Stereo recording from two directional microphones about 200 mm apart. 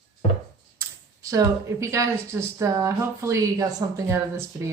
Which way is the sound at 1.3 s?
15° right (ahead or behind).